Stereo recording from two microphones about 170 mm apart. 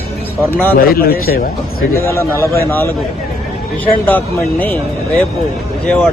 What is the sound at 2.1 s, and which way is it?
Speech, 15° left (ahead or behind).